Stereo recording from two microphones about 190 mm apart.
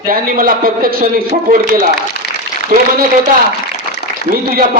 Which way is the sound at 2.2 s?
60° left (ahead or behind).